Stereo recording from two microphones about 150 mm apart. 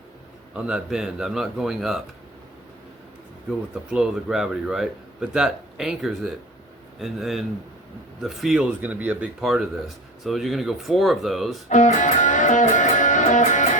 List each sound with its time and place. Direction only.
0.5 s a man's voice: 5° right (ahead or behind)
3.8 s a man's voice: 5° right (ahead or behind)
11.7 s music: 55° left (ahead or behind)